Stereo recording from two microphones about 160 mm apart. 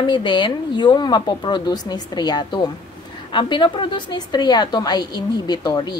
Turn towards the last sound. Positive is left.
turn(degrees=25)  # may be behind; listen again after turning